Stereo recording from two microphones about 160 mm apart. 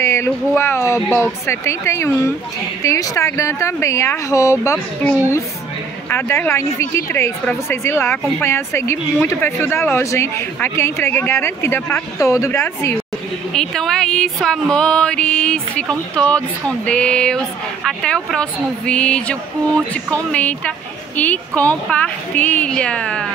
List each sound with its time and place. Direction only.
0.0 s speech: 15° left (ahead or behind)
6.0 s speech: 15° left (ahead or behind)
13.5 s music: 5° left (ahead or behind)
19.9 s speech: 10° left (ahead or behind)